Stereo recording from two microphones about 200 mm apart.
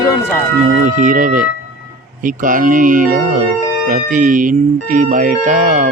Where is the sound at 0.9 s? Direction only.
40° right (ahead or behind).